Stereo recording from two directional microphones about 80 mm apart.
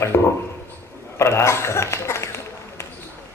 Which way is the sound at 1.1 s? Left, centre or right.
Left.